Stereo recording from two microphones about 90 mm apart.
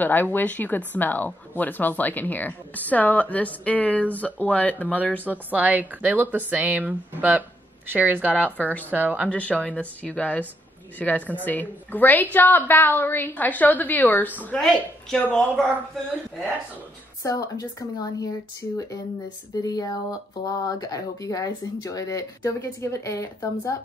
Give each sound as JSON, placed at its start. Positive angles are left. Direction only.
{"t": 0.0, "sound": "speech", "side_deg": 20}
{"t": 5.2, "sound": "a woman's voice", "side_deg": -20}
{"t": 8.4, "sound": "speech", "side_deg": 15}
{"t": 8.9, "sound": "a woman's voice", "side_deg": -15}
{"t": 9.3, "sound": "speech", "side_deg": 15}
{"t": 16.1, "sound": "a woman's voice", "side_deg": -15}
{"t": 17.2, "sound": "speech", "side_deg": 40}
{"t": 19.6, "sound": "speech", "side_deg": 45}